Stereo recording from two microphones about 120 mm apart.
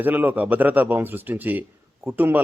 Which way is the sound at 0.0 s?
15° right (ahead or behind).